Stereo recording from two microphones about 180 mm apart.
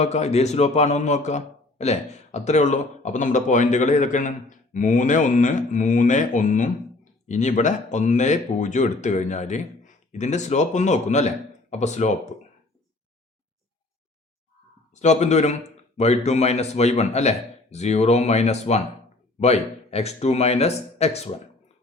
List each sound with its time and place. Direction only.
0.0 s a man's voice: 35° left (ahead or behind)
14.9 s a man's voice: 40° left (ahead or behind)